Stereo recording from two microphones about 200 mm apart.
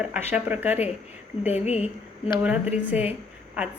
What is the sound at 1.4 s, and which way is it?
Speech, 30° left (ahead or behind).